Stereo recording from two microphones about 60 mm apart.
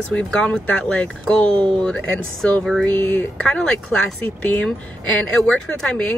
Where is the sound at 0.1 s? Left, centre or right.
Centre.